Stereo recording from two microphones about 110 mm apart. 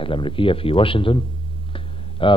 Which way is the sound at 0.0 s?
50° left (ahead or behind).